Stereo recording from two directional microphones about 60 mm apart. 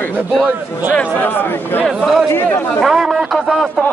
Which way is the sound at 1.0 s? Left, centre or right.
Left.